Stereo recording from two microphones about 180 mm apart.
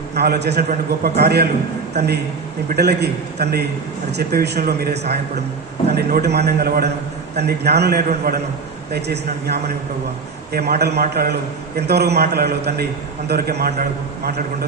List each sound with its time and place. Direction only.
0.1 s a man's voice: 65° right (ahead or behind)